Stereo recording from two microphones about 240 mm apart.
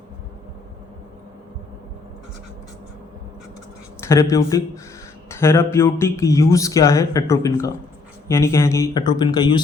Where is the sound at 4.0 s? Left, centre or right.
Centre.